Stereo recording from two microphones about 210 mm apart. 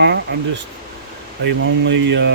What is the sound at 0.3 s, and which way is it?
Speech, 55° right (ahead or behind).